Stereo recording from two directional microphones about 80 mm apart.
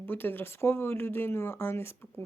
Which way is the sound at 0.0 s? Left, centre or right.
Left.